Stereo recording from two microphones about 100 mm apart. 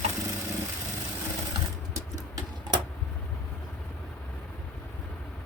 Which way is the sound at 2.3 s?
45° right (ahead or behind).